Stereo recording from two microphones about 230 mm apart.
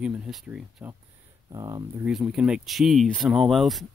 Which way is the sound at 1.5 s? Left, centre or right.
Centre.